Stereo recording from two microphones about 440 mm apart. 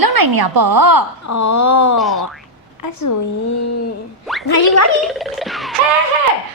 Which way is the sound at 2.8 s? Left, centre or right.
Left.